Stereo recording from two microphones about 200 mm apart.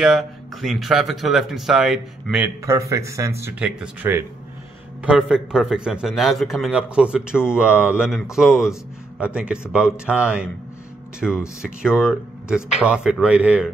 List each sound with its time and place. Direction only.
0.0 s a man's voice: centre (ahead or behind)